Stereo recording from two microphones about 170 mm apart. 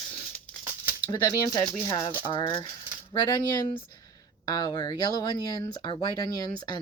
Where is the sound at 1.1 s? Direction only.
20° left (ahead or behind).